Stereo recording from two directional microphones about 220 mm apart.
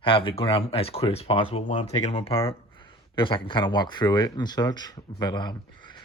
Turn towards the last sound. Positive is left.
turn(degrees=20)  # may be behind; listen again after turning